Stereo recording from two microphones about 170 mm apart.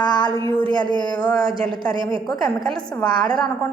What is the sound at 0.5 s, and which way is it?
A woman's voice, 10° left (ahead or behind).